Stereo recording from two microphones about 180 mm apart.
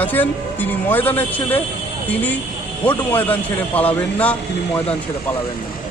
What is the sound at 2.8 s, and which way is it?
Speech, 10° left (ahead or behind).